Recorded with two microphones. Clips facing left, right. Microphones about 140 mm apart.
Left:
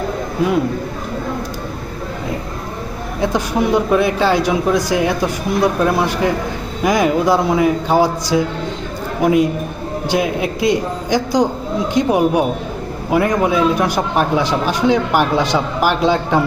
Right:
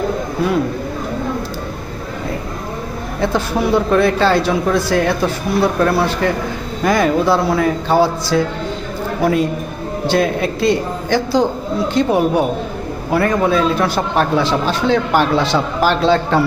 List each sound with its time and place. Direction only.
3.2 s a man's voice: 15° left (ahead or behind)